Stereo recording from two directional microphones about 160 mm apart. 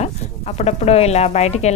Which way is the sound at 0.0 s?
40° left (ahead or behind).